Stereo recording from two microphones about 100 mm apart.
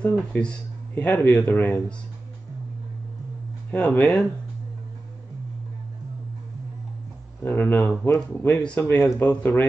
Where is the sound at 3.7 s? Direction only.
15° left (ahead or behind).